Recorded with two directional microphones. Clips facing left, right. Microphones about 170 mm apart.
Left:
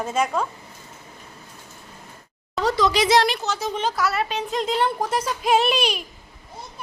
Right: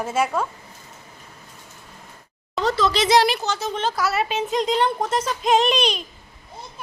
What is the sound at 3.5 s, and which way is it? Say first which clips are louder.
Speech: even; 10° left (ahead or behind).